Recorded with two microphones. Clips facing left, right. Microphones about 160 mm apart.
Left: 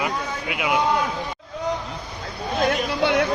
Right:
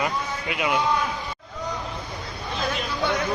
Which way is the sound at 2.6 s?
65° left (ahead or behind).